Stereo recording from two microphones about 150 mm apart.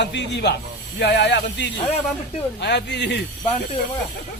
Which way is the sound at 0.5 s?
90° left.